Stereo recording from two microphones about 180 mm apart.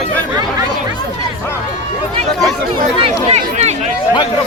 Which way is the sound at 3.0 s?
35° right (ahead or behind).